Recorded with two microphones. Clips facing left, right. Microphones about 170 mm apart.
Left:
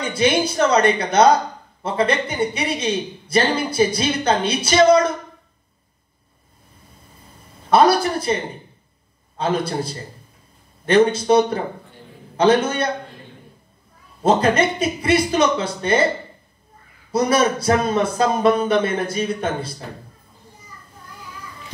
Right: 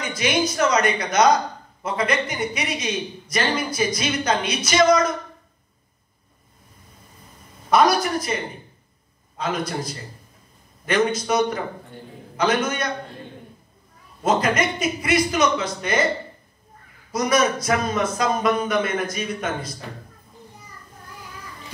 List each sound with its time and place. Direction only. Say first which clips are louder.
0.0 s speech: left 4 dB; 30° left (ahead or behind)
7.7 s speech: left 3 dB; 30° left (ahead or behind)
9.4 s speech: left 4 dB; 30° left (ahead or behind)
14.2 s speech: left 4 dB; 30° left (ahead or behind)
17.1 s speech: left 3 dB; 30° left (ahead or behind)